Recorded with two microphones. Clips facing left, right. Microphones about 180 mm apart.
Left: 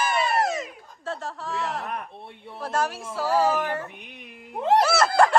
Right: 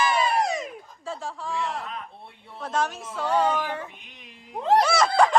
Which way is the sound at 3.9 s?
55° left (ahead or behind).